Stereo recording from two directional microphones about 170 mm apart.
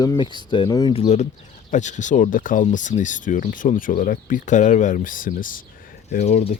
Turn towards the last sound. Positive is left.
turn(degrees=40)  # may be behind; listen again after turning